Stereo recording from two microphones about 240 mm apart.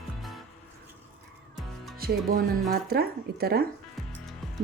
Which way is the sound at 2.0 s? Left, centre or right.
Right.